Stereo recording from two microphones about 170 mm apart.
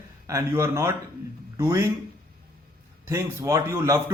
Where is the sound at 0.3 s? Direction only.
15° right (ahead or behind).